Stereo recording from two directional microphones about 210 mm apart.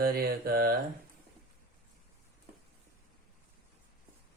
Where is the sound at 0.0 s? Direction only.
45° right (ahead or behind).